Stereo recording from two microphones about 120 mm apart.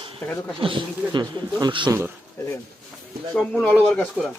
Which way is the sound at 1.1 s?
35° right (ahead or behind).